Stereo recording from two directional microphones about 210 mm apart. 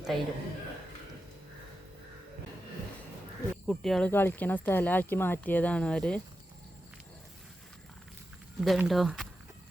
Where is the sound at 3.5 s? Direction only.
5° left (ahead or behind).